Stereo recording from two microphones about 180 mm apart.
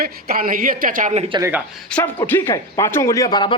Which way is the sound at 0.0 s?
55° right (ahead or behind).